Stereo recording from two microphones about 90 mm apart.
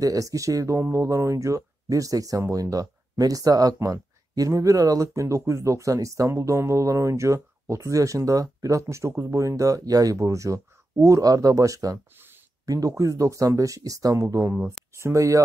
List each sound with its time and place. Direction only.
0.0 s speech: 40° right (ahead or behind)